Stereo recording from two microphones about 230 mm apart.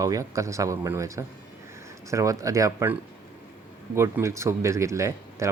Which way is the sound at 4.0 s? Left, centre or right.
Centre.